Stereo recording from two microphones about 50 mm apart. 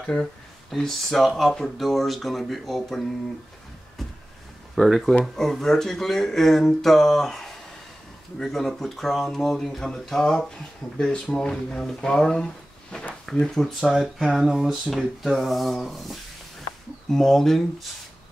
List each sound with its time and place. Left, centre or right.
0.0 s speech: centre
4.7 s speech: centre
11.0 s speech: centre
13.7 s speech: centre